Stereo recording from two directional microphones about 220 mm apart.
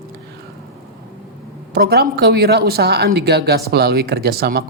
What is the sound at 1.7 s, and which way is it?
Speech, 45° right (ahead or behind).